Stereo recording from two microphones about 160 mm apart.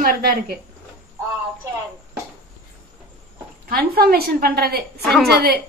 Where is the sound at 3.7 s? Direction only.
70° right (ahead or behind).